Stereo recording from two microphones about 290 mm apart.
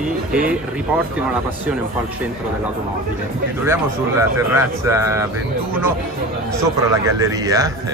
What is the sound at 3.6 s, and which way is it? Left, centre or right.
Speech, centre.